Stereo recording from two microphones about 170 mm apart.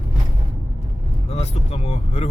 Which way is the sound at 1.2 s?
40° left (ahead or behind).